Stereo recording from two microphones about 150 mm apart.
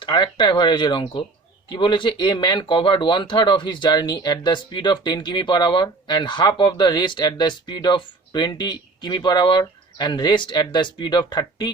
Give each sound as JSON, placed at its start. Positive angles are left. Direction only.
{"t": 0.0, "sound": "speech", "side_deg": 30}